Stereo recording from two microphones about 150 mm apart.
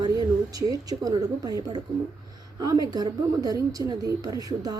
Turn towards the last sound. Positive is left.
turn(degrees=-25)  # may be behind; listen again after turning